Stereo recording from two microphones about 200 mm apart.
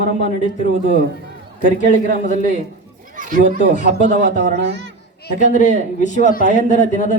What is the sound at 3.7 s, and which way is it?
Speech, 35° left (ahead or behind).